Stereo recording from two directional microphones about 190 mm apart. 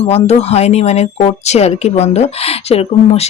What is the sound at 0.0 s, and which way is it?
Speech, 35° left (ahead or behind).